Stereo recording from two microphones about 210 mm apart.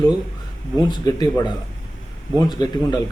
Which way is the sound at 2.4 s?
20° left (ahead or behind).